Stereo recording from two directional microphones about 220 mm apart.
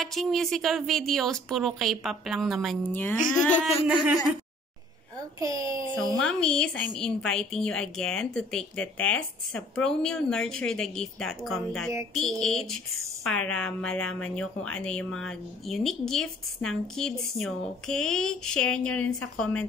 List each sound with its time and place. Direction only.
0.0 s a woman's voice: centre (ahead or behind)
3.8 s a woman's voice: 5° right (ahead or behind)
5.4 s a child's voice: 15° right (ahead or behind)
6.2 s a woman's voice: 5° left (ahead or behind)